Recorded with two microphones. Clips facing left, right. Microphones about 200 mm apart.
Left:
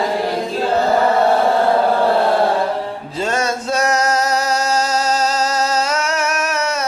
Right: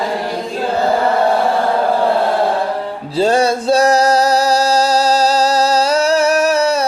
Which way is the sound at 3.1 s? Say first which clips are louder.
Right 7 dB; 35° right (ahead or behind).